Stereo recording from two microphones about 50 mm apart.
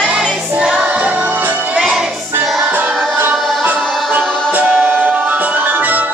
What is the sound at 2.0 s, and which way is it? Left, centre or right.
Child singing, centre.